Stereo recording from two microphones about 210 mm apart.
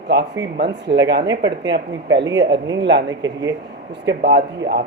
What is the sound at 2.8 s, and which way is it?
Speech, 55° right (ahead or behind).